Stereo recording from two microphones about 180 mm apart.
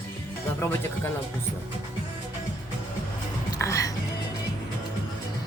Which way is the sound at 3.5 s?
20° left (ahead or behind).